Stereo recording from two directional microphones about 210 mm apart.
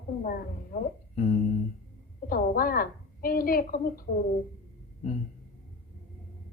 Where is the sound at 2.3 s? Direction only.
45° left (ahead or behind).